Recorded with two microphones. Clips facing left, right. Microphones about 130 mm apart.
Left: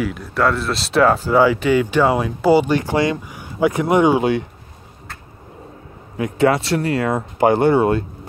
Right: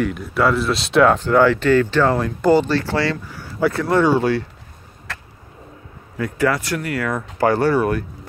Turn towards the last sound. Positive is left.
turn(degrees=25)  # may be behind; listen again after turning